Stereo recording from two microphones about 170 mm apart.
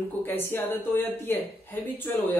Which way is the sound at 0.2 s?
10° left (ahead or behind).